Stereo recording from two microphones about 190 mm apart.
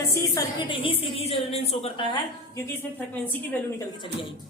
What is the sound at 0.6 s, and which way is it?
A woman's voice, 30° left (ahead or behind).